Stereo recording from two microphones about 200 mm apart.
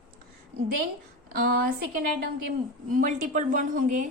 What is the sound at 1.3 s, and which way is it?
Speech, 50° right (ahead or behind).